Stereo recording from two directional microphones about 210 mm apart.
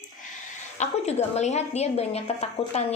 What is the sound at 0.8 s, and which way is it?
A woman's voice, 30° left (ahead or behind).